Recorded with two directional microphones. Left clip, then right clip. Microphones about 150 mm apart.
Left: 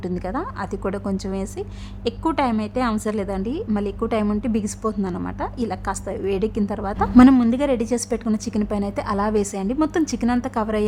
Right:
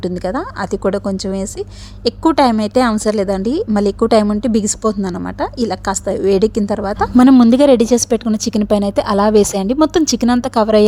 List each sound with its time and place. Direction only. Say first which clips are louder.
0.0 s a woman's voice: right 7 dB; 25° right (ahead or behind)
7.2 s speech: right 4 dB; 60° right (ahead or behind)
7.5 s a woman's voice: right 11 dB; 50° right (ahead or behind)